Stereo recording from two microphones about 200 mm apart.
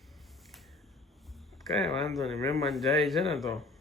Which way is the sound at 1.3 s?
Centre (ahead or behind).